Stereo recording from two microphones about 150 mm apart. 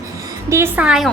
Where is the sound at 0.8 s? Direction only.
5° right (ahead or behind).